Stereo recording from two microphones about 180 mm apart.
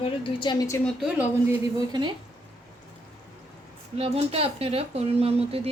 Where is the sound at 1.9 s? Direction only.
25° right (ahead or behind).